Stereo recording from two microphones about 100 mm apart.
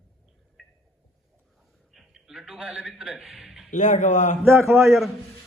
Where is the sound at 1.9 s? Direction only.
5° right (ahead or behind).